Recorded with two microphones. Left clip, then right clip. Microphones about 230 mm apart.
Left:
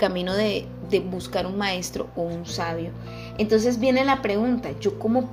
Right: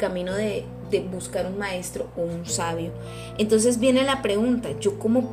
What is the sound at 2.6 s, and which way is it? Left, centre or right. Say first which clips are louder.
Speech: right 1 dB; centre.